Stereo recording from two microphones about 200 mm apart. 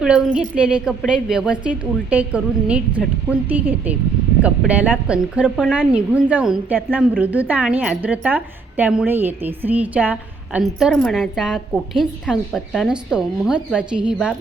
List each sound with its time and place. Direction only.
0.0 s a woman's voice: 5° right (ahead or behind)